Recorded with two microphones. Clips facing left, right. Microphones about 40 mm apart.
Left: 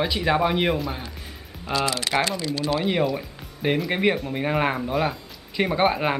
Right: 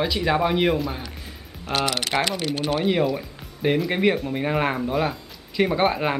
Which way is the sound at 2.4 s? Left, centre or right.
Right.